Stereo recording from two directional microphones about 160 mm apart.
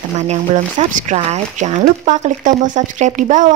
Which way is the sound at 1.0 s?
45° right (ahead or behind).